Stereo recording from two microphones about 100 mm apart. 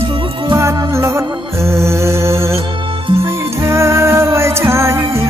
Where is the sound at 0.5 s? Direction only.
30° right (ahead or behind).